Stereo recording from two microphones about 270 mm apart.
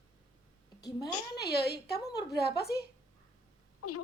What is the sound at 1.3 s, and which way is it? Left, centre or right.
Speech, left.